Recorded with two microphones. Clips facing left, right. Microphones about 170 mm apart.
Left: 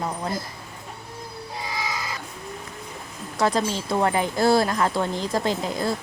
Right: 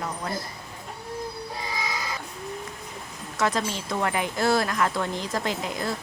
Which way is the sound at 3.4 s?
30° left (ahead or behind).